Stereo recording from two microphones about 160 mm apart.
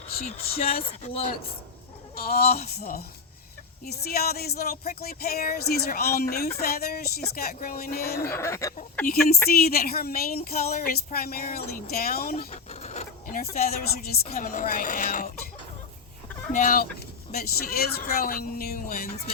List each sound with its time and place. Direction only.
0.4 s speech: 70° left (ahead or behind)
0.9 s speech: 40° left (ahead or behind)
2.1 s speech: 70° left (ahead or behind)
8.3 s speech: 15° left (ahead or behind)
9.0 s speech: 70° left (ahead or behind)
12.5 s a sound: 45° left (ahead or behind)
13.2 s speech: 65° left (ahead or behind)
14.4 s speech: 60° left (ahead or behind)
16.5 s speech: 60° left (ahead or behind)
17.3 s speech: 75° left (ahead or behind)